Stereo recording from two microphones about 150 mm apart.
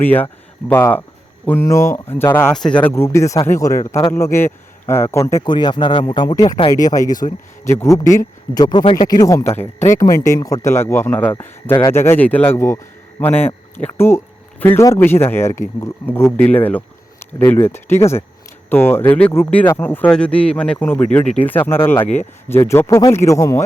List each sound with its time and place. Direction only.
0.0 s speech: 10° left (ahead or behind)
2.5 s speech: 5° left (ahead or behind)
5.5 s speech: 30° left (ahead or behind); by 21.8 s 15° left (ahead or behind)
21.9 s speech: 45° left (ahead or behind)
22.4 s speech: 15° left (ahead or behind)